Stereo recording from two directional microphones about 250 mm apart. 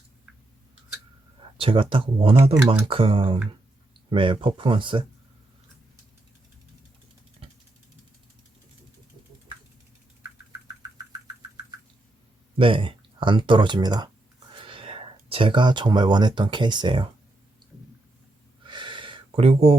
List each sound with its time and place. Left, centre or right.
1.4 s speech: right
7.4 s vehicle: right
12.5 s speech: right
18.6 s a sound: centre